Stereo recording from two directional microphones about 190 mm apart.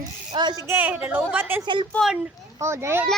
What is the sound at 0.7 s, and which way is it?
Speech, 10° right (ahead or behind).